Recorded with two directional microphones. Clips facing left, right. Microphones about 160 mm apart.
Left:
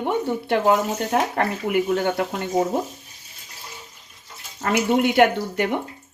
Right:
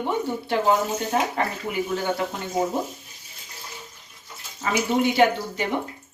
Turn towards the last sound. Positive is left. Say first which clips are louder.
# left 2 dB
turn(degrees=60)  # may be behind; listen again after turning